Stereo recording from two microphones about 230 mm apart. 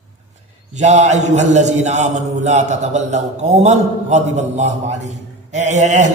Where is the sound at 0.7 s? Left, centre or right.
Right.